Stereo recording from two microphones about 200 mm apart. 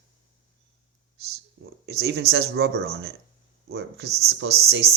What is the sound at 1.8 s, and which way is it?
Speech, 60° right (ahead or behind).